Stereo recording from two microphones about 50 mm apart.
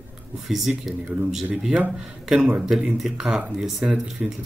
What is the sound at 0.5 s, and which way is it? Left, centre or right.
Speech, centre.